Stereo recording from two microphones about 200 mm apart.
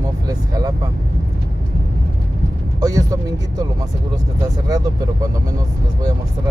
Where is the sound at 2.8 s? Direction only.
20° right (ahead or behind).